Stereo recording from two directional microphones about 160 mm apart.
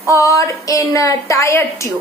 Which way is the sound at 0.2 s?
20° left (ahead or behind).